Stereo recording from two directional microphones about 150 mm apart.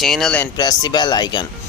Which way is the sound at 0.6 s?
25° left (ahead or behind).